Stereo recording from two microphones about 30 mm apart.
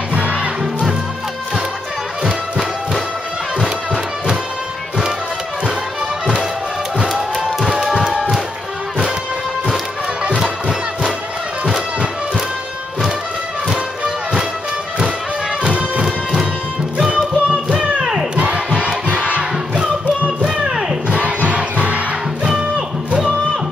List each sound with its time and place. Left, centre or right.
0.2 s music: right
3.5 s music: right
7.6 s music: centre
10.3 s music: centre
16.0 s music: right
17.5 s music: right
18.3 s crowd: right
19.1 s crowd: right
21.1 s music: right
22.8 s music: right